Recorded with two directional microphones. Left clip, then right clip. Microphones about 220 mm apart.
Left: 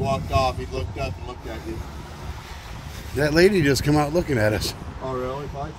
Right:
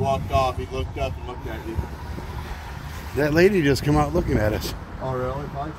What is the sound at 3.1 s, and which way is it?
Speech, 5° left (ahead or behind).